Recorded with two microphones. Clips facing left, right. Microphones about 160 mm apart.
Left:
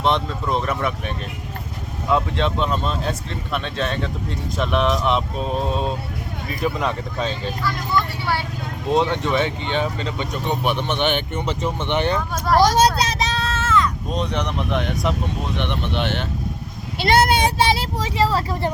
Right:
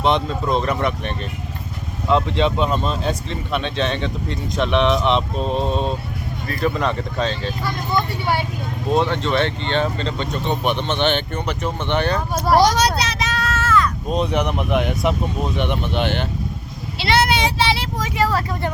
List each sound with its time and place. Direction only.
0.0 s speech: centre (ahead or behind)
7.6 s speech: 20° right (ahead or behind)
8.9 s speech: 15° left (ahead or behind)
12.5 s speech: 15° right (ahead or behind)
12.7 s a sound: 35° left (ahead or behind)
14.1 s speech: 5° right (ahead or behind)
17.0 s speech: 50° left (ahead or behind)
17.9 s speech: 30° left (ahead or behind)